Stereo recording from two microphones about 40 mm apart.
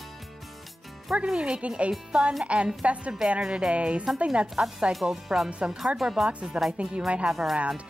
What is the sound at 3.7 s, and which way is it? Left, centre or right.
Speech, right.